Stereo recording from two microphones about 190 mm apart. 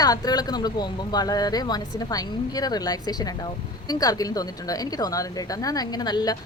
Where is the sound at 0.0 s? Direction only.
20° left (ahead or behind).